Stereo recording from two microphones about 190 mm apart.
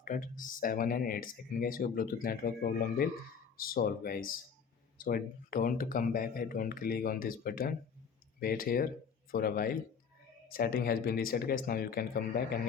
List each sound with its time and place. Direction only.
0.0 s speech: 45° left (ahead or behind)